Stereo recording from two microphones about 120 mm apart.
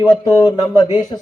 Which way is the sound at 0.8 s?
35° left (ahead or behind).